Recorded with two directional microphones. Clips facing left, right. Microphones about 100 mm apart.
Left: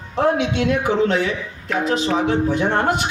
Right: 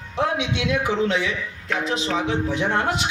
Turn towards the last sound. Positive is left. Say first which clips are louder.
# left 4 dB
turn(degrees=45)  # may be behind; listen again after turning